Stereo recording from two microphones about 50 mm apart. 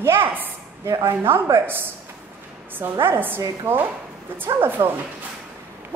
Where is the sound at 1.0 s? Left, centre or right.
Right.